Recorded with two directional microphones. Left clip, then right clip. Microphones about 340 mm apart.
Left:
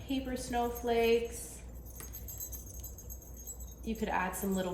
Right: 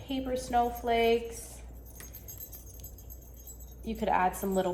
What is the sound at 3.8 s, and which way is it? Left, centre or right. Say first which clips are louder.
Speech: right 6 dB; centre.